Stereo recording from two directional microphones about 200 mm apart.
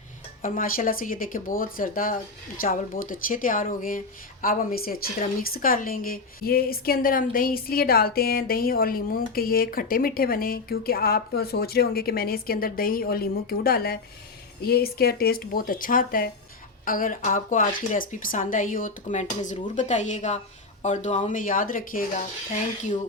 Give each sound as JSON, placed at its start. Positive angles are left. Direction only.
{"t": 0.4, "sound": "speech", "side_deg": 45}